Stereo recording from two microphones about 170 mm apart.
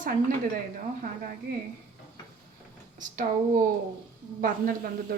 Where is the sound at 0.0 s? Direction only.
50° right (ahead or behind).